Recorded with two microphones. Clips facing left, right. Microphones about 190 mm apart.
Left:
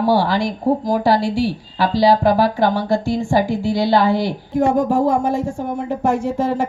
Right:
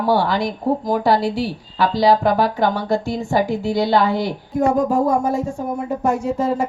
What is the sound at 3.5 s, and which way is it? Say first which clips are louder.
Speech: left 1 dB; centre (ahead or behind).